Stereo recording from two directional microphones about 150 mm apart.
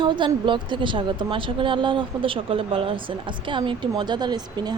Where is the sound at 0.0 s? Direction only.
30° right (ahead or behind).